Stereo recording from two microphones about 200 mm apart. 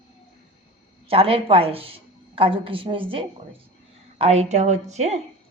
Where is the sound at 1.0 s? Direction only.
30° right (ahead or behind).